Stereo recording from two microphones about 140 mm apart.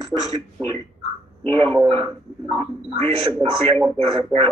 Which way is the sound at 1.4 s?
35° right (ahead or behind).